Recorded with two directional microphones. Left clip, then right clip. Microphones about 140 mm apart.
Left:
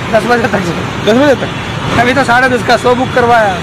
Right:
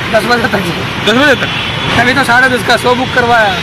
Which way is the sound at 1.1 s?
15° left (ahead or behind).